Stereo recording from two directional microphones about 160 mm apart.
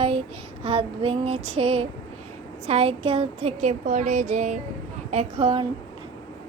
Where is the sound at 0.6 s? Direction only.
35° right (ahead or behind).